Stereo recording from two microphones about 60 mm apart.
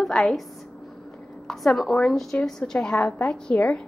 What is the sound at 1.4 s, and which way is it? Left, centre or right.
A woman's voice, centre.